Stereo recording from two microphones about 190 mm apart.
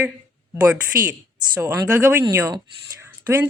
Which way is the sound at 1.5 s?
15° right (ahead or behind).